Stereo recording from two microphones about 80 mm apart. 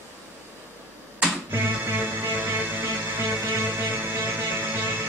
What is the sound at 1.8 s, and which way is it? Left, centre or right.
Music, right.